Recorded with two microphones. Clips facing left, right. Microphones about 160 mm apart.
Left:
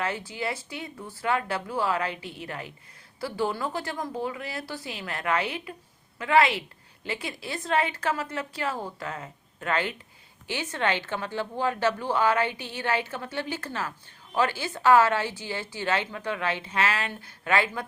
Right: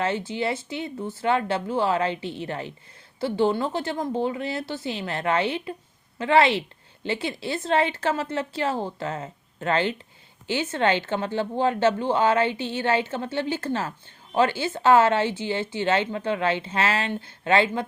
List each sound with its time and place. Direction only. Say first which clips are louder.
0.0 s speech: right 5 dB; 25° right (ahead or behind)